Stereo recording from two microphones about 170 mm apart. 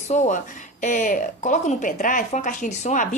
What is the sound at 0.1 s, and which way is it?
Speech, 45° left (ahead or behind).